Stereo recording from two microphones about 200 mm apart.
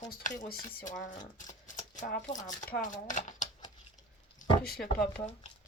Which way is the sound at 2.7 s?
45° left (ahead or behind).